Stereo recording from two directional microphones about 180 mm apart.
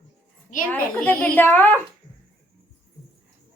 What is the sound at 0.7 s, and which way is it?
A woman's voice, 10° left (ahead or behind).